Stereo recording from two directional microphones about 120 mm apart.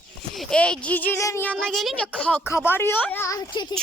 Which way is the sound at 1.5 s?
Centre (ahead or behind).